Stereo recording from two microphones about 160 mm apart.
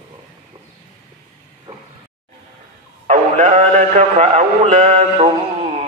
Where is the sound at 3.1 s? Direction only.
50° right (ahead or behind).